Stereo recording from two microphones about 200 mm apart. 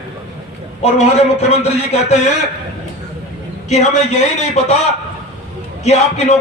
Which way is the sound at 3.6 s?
35° left (ahead or behind).